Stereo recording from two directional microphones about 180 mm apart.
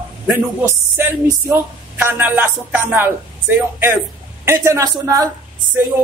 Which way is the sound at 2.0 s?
10° right (ahead or behind).